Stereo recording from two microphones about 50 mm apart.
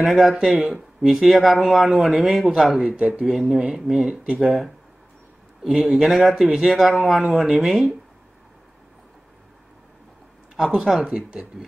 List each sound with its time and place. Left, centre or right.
0.2 s speech: centre
0.6 s speech: right
1.0 s speech: centre
2.8 s speech: centre
4.1 s speech: right
5.6 s speech: centre
10.5 s speech: centre